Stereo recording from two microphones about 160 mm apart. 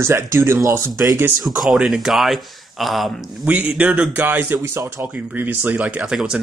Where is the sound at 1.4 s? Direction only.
Centre (ahead or behind).